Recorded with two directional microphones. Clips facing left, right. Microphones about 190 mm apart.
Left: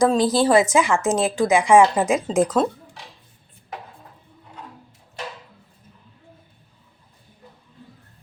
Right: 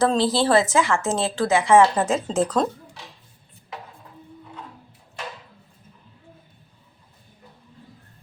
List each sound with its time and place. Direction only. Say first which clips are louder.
0.0 s speech: left 2 dB; 15° left (ahead or behind)